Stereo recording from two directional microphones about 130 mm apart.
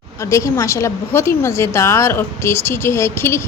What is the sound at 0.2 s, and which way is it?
A woman's voice, 25° left (ahead or behind).